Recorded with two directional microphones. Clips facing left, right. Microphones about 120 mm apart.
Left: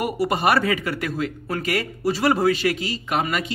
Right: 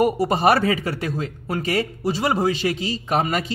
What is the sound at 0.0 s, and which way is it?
A man's voice, 35° right (ahead or behind).